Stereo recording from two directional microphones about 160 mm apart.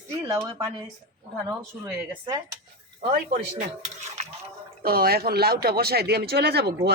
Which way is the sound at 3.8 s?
45° right (ahead or behind).